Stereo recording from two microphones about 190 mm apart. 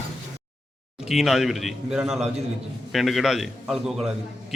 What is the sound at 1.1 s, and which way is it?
A man's voice, centre (ahead or behind).